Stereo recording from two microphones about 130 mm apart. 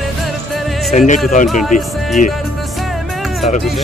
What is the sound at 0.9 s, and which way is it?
Speech, 70° left (ahead or behind).